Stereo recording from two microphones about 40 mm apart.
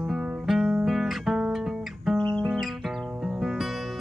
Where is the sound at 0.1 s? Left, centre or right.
Centre.